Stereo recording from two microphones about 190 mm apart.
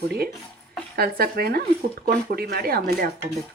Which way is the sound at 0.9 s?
55° right (ahead or behind).